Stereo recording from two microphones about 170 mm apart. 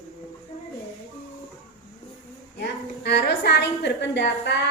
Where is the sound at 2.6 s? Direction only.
75° left (ahead or behind).